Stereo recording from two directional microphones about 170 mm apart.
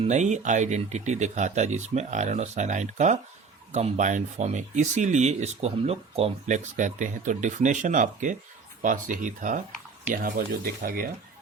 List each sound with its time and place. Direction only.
0.0 s speech: 45° right (ahead or behind); by 11.1 s 60° right (ahead or behind)